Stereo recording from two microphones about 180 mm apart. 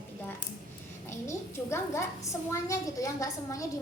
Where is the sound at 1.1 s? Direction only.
15° left (ahead or behind).